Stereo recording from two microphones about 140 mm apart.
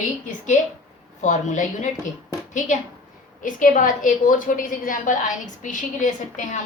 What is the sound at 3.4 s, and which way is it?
A woman's voice, 70° left (ahead or behind).